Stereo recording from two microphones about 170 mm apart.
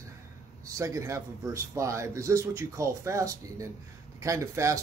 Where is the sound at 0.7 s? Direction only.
20° right (ahead or behind).